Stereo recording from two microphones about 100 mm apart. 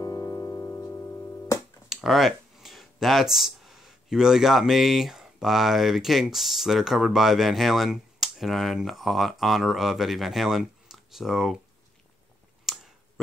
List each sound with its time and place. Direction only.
0.0 s music: 35° left (ahead or behind)
1.9 s speech: centre (ahead or behind)
12.7 s finger snapping: centre (ahead or behind)